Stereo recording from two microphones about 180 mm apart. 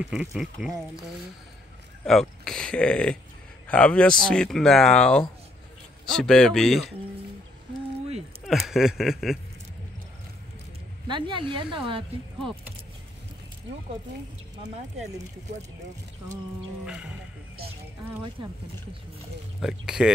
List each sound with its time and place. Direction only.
0.0 s speech: centre (ahead or behind)
2.0 s speech: centre (ahead or behind)
8.5 s speech: centre (ahead or behind)
11.1 s speech: 25° right (ahead or behind)
16.8 s speech: 5° right (ahead or behind)
19.6 s speech: 5° right (ahead or behind)